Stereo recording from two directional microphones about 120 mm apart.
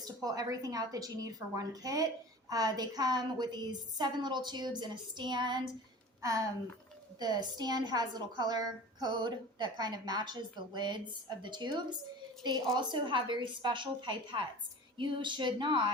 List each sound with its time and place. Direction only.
0.0 s a woman's voice: 30° right (ahead or behind)
6.2 s a woman's voice: 25° right (ahead or behind)